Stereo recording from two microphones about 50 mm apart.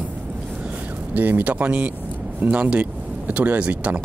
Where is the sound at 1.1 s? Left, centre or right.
Right.